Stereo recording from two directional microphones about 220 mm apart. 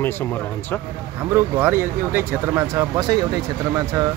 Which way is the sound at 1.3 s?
10° right (ahead or behind).